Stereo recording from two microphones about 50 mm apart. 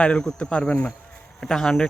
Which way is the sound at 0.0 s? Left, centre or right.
Centre.